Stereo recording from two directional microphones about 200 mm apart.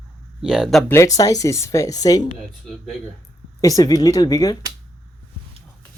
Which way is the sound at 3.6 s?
15° left (ahead or behind).